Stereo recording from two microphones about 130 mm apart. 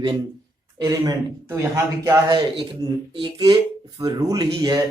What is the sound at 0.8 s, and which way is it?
A man's voice, 25° right (ahead or behind).